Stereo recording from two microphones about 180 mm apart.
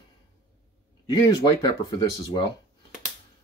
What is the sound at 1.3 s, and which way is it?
Speech, 25° left (ahead or behind).